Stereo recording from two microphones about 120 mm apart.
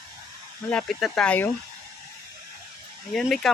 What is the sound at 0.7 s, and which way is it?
Speech, 10° left (ahead or behind).